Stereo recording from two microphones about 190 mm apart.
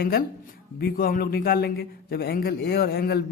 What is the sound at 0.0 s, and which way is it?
A man's voice, 50° left (ahead or behind).